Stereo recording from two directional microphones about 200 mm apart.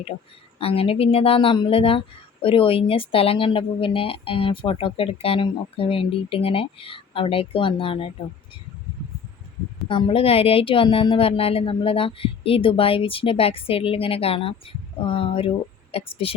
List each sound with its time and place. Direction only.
0.1 s speech: 30° left (ahead or behind)
9.9 s speech: 25° left (ahead or behind)